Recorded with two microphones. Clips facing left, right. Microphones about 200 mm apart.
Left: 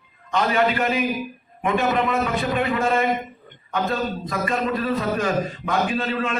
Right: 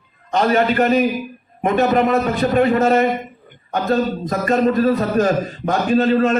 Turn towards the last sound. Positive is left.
turn(degrees=-40)  # may be behind; listen again after turning